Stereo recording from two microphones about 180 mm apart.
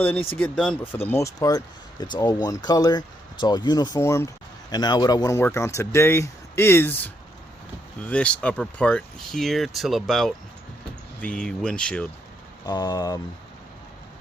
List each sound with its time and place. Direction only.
0.0 s speech: 10° left (ahead or behind)
12.6 s speech: 20° left (ahead or behind)